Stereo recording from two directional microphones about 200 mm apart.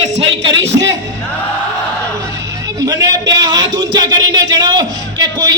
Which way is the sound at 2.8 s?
15° right (ahead or behind).